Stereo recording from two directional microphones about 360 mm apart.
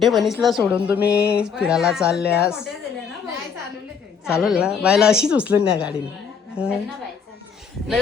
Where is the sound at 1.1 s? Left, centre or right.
Left.